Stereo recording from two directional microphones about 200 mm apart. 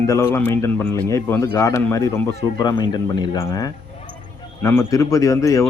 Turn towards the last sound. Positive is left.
turn(degrees=15)  # may be behind; listen again after turning